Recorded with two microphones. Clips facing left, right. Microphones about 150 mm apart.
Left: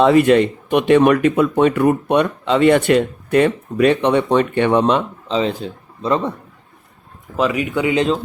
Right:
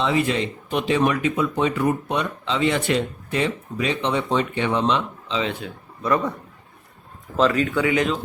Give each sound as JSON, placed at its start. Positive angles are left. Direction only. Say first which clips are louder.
{"t": 0.0, "sound": "speech", "louder": "left 10 dB", "side_deg": 60}
{"t": 5.4, "sound": "speech", "louder": "left 6 dB", "side_deg": 35}
{"t": 7.3, "sound": "speech", "louder": "left 1 dB", "side_deg": 10}